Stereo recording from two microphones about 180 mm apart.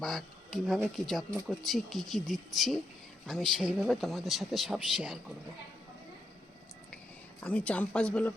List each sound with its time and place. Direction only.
0.0 s speech: centre (ahead or behind)
7.4 s a woman's voice: 5° left (ahead or behind)